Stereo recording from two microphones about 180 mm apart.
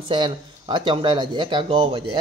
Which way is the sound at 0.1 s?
25° right (ahead or behind).